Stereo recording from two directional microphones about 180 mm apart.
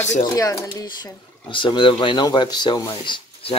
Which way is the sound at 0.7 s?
25° left (ahead or behind).